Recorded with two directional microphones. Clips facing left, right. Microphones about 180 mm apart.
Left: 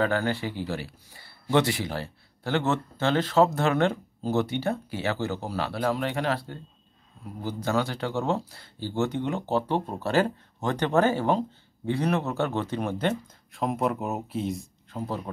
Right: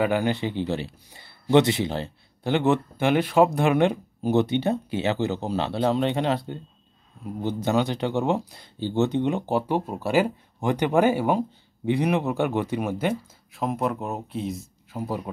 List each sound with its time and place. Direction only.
0.0 s speech: 15° right (ahead or behind)